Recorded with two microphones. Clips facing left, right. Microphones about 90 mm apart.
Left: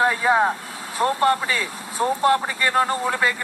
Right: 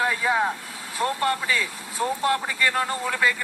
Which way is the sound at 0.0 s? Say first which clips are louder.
Left 5 dB; 35° left (ahead or behind).